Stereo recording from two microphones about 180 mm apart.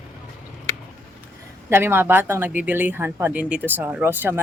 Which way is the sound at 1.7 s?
10° right (ahead or behind).